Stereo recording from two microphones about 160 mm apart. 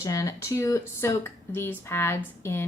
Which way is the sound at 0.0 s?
20° left (ahead or behind).